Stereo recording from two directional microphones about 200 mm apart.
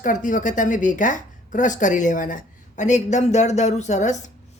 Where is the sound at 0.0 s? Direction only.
40° left (ahead or behind).